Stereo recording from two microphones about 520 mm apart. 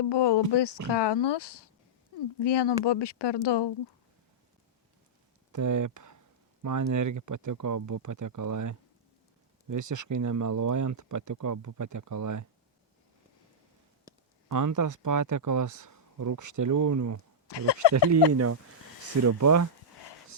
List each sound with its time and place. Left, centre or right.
0.0 s speech: left
5.5 s speech: right
14.5 s speech: right
17.5 s speech: left
18.3 s speech: right